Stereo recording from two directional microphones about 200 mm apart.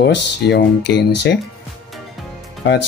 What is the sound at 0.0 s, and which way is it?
Speech, 55° left (ahead or behind).